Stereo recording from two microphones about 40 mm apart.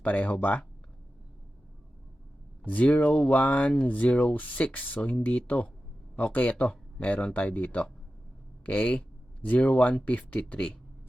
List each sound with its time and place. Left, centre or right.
0.0 s speech: left
2.6 s speech: left